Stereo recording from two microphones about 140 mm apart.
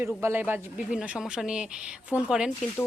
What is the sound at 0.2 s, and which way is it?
A woman's voice, 15° right (ahead or behind).